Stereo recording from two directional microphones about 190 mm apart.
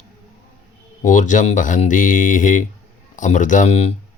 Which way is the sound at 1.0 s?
40° left (ahead or behind).